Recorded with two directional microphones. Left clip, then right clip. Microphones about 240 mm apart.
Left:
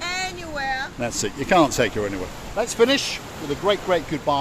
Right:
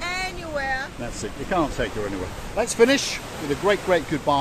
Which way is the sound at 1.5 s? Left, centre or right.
Left.